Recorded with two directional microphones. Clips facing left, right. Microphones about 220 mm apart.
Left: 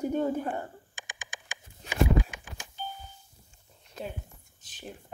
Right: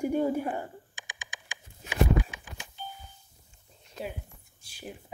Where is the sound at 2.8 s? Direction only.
45° left (ahead or behind).